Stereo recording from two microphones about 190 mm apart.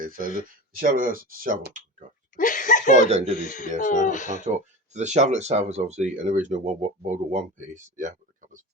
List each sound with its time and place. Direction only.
0.0 s speech: 50° right (ahead or behind)
2.3 s a sound: 40° left (ahead or behind)
2.9 s speech: 35° right (ahead or behind)
3.3 s speech: 40° left (ahead or behind)
4.9 s speech: 40° right (ahead or behind)